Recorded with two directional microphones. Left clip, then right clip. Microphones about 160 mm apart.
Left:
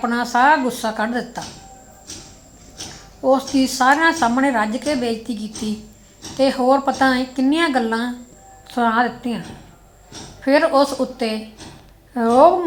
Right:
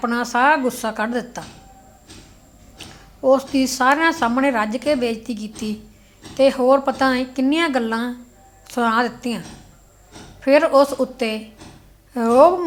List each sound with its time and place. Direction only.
0.0 s speech: 15° right (ahead or behind)
2.7 s speech: 15° right (ahead or behind)
10.4 s speech: 15° right (ahead or behind)